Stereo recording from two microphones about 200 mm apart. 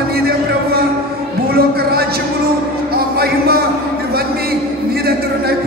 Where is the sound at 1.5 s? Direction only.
50° right (ahead or behind).